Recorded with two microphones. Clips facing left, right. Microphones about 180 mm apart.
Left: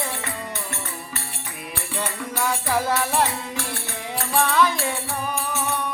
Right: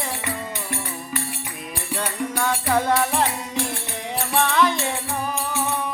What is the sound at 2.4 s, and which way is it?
Music, 5° left (ahead or behind).